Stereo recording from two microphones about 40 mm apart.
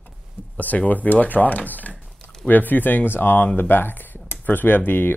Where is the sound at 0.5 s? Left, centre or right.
Left.